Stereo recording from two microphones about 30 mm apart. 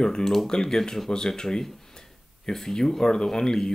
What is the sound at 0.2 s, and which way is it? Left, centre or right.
Speech, centre.